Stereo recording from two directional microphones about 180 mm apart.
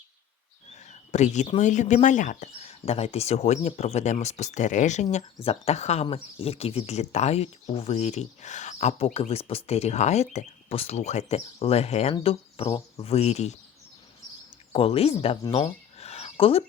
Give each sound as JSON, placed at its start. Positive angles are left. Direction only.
{"t": 0.7, "sound": "a sound", "side_deg": 40}
{"t": 1.5, "sound": "speech", "side_deg": 40}
{"t": 14.7, "sound": "speech", "side_deg": 30}